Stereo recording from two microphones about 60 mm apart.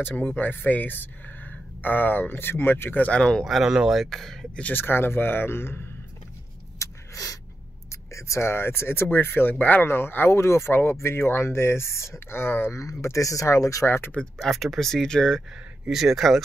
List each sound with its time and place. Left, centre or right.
0.1 s speech: left
3.1 s speech: centre
3.4 s speech: centre
4.7 s speech: left
6.8 s a sound: left
7.9 s speech: left
12.7 s speech: left
13.8 s speech: left
14.4 s speech: centre
15.9 s speech: centre